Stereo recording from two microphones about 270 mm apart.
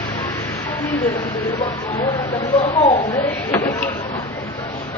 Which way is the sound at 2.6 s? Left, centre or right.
Left.